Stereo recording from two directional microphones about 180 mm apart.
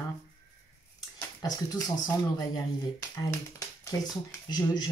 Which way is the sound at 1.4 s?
20° left (ahead or behind).